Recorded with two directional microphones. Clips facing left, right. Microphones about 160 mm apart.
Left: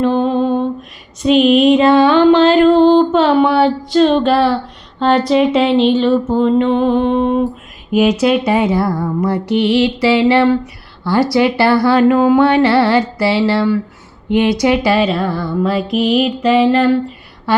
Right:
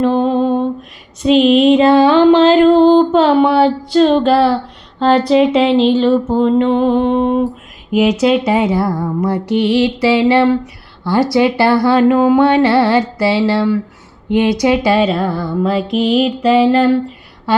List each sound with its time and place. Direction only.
0.0 s lullaby: 35° right (ahead or behind)
1.2 s music: 30° right (ahead or behind)
7.9 s music: 20° right (ahead or behind)
11.0 s speech: 20° right (ahead or behind)
14.3 s music: 15° right (ahead or behind)
15.0 s music: 35° right (ahead or behind)